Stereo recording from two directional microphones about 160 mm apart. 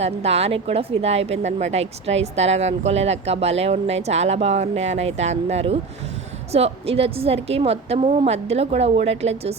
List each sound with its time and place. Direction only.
0.0 s speech: 40° right (ahead or behind)